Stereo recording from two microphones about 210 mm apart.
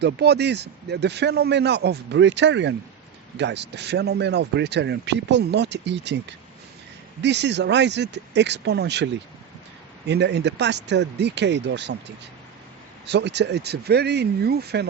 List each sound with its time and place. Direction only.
0.0 s speech: 50° right (ahead or behind)
7.2 s speech: 55° right (ahead or behind)
10.1 s speech: 55° right (ahead or behind)